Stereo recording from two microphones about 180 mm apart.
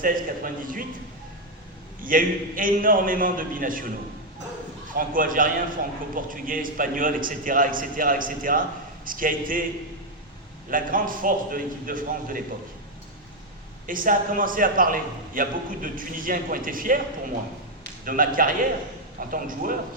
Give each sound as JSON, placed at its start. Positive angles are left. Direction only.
{"t": 0.0, "sound": "a man's voice", "side_deg": -50}
{"t": 2.0, "sound": "a man's voice", "side_deg": -50}
{"t": 4.9, "sound": "a man's voice", "side_deg": -50}
{"t": 10.7, "sound": "a man's voice", "side_deg": -50}
{"t": 13.8, "sound": "a man's voice", "side_deg": -50}
{"t": 18.0, "sound": "a man's voice", "side_deg": -50}